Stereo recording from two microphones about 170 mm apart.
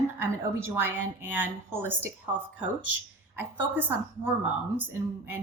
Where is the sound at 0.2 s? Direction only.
10° right (ahead or behind).